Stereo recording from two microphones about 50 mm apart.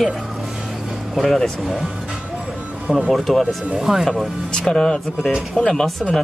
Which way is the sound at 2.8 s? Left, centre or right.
Centre.